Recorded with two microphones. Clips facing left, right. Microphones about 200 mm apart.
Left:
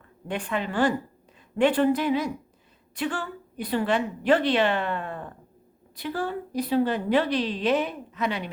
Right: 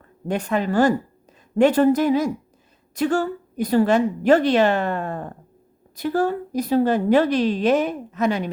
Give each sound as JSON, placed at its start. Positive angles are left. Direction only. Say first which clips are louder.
{"t": 0.3, "sound": "a woman's voice", "louder": "right 7 dB", "side_deg": -40}